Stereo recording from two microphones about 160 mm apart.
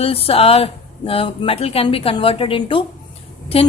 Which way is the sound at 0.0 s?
35° left (ahead or behind).